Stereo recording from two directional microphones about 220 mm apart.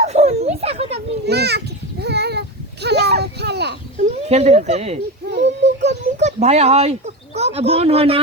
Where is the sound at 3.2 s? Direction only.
50° right (ahead or behind).